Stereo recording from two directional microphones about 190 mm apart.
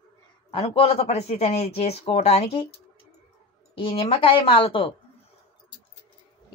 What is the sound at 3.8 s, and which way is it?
A woman's voice, 30° left (ahead or behind).